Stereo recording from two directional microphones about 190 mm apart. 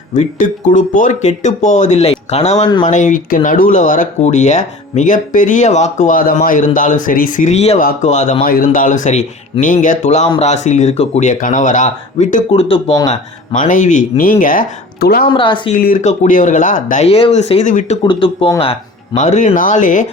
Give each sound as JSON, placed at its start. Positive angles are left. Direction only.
{"t": 0.2, "sound": "speech", "side_deg": 40}
{"t": 15.3, "sound": "speech", "side_deg": 25}
{"t": 15.7, "sound": "speech", "side_deg": 45}
{"t": 18.0, "sound": "speech", "side_deg": 25}